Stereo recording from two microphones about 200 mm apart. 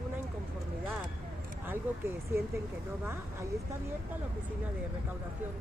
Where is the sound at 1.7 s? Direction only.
10° right (ahead or behind).